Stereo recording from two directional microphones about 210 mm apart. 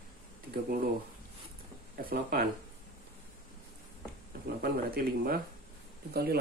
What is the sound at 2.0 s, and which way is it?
Speech, 45° right (ahead or behind).